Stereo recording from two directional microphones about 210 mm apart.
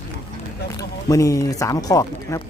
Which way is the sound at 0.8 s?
15° left (ahead or behind).